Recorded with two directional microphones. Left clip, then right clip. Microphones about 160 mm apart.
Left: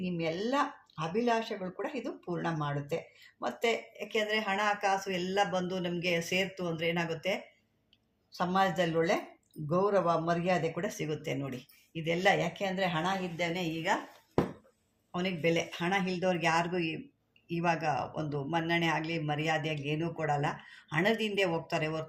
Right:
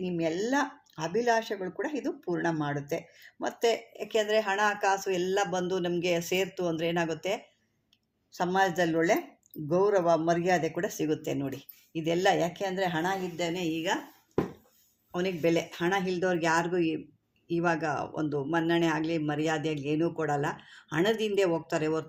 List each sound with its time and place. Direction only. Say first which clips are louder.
0.0 s speech: right 4 dB; 45° right (ahead or behind)
15.1 s speech: right 3 dB; 40° right (ahead or behind)